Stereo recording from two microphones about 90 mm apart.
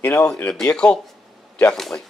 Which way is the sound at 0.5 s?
10° left (ahead or behind).